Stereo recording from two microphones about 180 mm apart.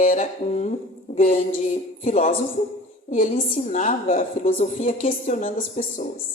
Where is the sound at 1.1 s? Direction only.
45° left (ahead or behind).